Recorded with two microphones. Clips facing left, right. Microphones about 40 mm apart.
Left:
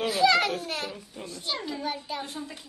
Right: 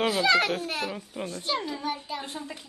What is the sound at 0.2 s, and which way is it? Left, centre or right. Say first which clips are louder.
A child's voice: left 4 dB; centre.